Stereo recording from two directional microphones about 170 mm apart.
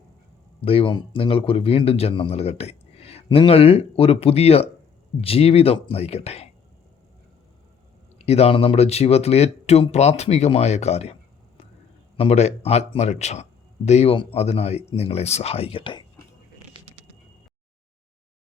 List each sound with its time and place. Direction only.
0.6 s a man's voice: 35° left (ahead or behind)
8.2 s a man's voice: 35° left (ahead or behind)
16.7 s a sound: 35° right (ahead or behind)